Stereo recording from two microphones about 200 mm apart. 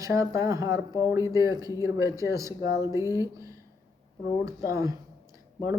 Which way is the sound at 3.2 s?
15° right (ahead or behind).